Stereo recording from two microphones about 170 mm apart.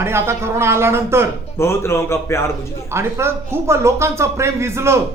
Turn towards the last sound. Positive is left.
turn(degrees=-15)  # may be behind; listen again after turning